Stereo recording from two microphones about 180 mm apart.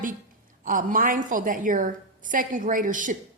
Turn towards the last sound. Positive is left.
turn(degrees=-45)  # may be behind; listen again after turning